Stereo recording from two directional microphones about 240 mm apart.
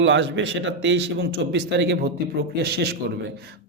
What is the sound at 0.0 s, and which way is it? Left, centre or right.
A man's voice, right.